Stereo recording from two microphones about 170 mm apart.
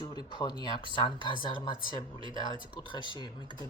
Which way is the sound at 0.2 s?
25° left (ahead or behind).